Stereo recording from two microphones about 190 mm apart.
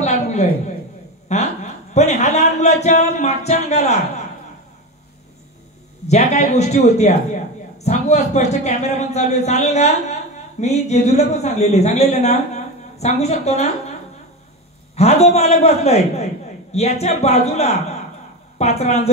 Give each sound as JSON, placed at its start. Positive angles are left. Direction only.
{"t": 0.0, "sound": "a sound", "side_deg": 35}
{"t": 6.0, "sound": "a woman's voice", "side_deg": 35}
{"t": 15.0, "sound": "a woman's voice", "side_deg": 35}